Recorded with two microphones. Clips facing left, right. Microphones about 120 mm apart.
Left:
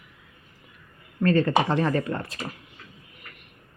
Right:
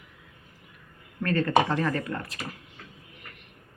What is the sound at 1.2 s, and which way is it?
Speech, 20° left (ahead or behind).